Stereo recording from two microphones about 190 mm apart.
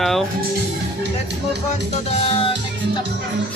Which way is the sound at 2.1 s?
30° left (ahead or behind).